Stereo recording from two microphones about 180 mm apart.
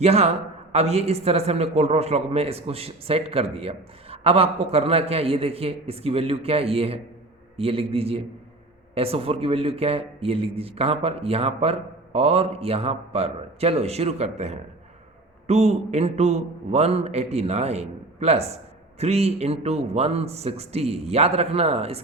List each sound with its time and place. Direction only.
0.0 s a man's voice: 35° right (ahead or behind)